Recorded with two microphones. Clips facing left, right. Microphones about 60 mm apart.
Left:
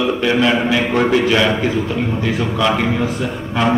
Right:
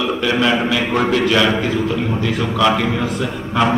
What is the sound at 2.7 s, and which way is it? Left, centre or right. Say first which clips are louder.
Speech: left 1 dB; centre.